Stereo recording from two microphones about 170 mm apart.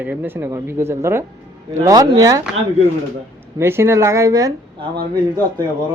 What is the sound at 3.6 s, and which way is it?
Speech, 15° right (ahead or behind).